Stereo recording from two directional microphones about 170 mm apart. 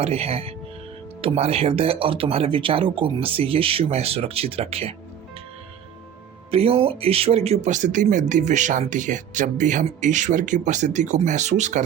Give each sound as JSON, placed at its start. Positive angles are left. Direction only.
{"t": 0.0, "sound": "speech", "side_deg": -35}
{"t": 6.5, "sound": "speech", "side_deg": -35}